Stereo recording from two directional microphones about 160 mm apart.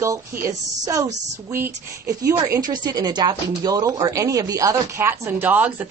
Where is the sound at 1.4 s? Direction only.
15° right (ahead or behind).